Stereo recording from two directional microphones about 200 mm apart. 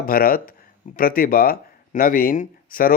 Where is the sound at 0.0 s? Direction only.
45° left (ahead or behind).